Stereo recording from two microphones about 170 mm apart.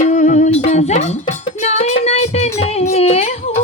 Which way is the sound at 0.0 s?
45° left (ahead or behind).